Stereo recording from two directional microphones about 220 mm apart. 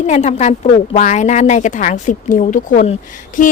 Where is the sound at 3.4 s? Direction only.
35° left (ahead or behind).